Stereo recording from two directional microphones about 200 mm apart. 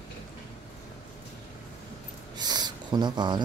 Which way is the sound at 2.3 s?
20° right (ahead or behind).